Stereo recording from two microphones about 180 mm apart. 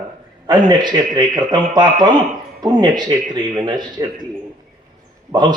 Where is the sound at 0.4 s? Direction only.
25° right (ahead or behind).